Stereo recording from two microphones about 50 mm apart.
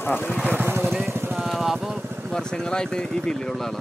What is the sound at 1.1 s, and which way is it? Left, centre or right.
Vehicle, right.